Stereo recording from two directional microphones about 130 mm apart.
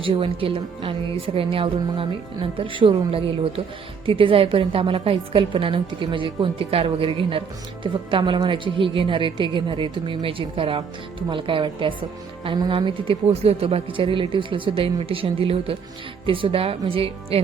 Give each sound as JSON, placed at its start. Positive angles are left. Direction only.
{"t": 0.0, "sound": "a woman's voice", "side_deg": -45}